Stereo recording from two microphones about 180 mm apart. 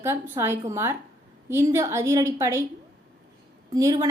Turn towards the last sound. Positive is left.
turn(degrees=-20)  # may be behind; listen again after turning